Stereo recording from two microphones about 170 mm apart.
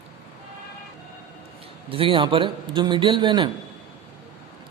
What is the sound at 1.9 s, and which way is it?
A man's voice, 30° right (ahead or behind).